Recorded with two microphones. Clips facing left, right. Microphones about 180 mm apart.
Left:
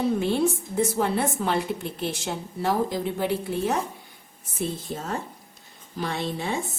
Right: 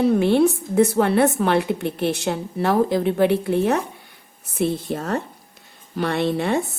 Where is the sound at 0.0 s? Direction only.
65° right (ahead or behind).